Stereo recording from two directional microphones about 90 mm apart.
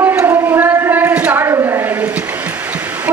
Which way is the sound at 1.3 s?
35° right (ahead or behind).